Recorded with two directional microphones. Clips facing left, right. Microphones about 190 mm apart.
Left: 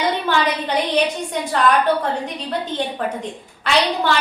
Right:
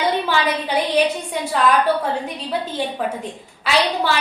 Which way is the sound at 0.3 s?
5° right (ahead or behind).